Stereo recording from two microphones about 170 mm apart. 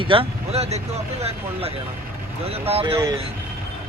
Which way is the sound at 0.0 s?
30° right (ahead or behind).